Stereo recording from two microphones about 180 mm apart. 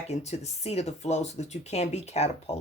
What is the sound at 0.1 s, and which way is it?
Speech, 40° left (ahead or behind).